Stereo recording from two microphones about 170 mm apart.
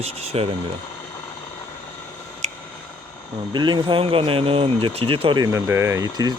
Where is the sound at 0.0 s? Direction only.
35° right (ahead or behind).